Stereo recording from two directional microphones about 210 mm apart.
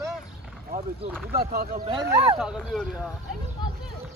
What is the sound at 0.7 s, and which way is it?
Speech, 45° right (ahead or behind).